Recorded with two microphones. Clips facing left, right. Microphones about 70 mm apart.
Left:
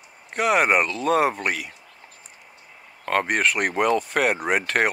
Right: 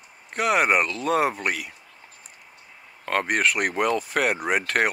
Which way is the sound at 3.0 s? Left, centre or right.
Centre.